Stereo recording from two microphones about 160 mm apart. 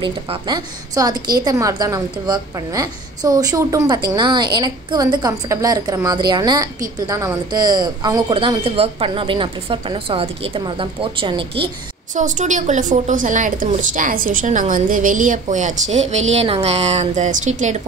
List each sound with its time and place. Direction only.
0.0 s a woman's voice: 30° right (ahead or behind)
12.1 s a woman's voice: 50° right (ahead or behind)